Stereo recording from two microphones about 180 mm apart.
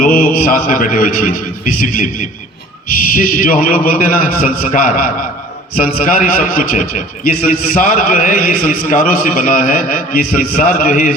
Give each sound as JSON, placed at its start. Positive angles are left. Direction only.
{"t": 0.0, "sound": "a man's voice", "side_deg": 55}
{"t": 3.2, "sound": "a man's voice", "side_deg": 50}